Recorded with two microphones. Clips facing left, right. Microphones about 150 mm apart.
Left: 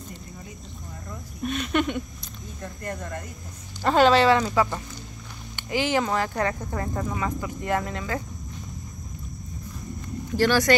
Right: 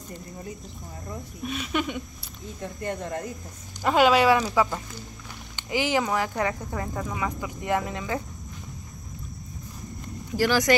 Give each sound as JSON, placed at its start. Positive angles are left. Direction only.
{"t": 1.4, "sound": "speech", "side_deg": -5}
{"t": 2.6, "sound": "speech", "side_deg": -25}
{"t": 3.8, "sound": "speech", "side_deg": -10}
{"t": 6.9, "sound": "speech", "side_deg": 5}
{"t": 7.2, "sound": "speech", "side_deg": -10}
{"t": 10.3, "sound": "speech", "side_deg": -10}